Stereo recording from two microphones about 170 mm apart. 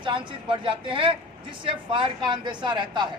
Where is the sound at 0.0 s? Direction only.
30° right (ahead or behind).